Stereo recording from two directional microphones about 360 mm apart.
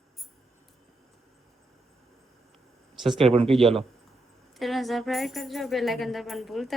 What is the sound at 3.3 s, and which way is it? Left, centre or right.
Speech, centre.